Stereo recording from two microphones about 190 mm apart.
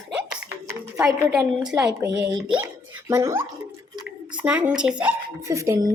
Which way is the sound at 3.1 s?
15° right (ahead or behind).